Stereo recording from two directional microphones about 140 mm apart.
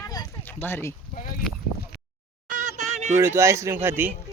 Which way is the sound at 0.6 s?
15° left (ahead or behind).